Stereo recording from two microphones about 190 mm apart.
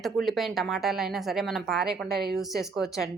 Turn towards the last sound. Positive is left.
turn(degrees=0)  # may be behind; listen again after turning